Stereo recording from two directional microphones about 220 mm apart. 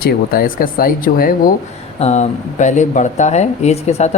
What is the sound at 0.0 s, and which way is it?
Speech, 40° left (ahead or behind).